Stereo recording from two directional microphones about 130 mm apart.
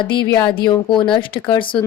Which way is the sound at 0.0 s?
40° left (ahead or behind).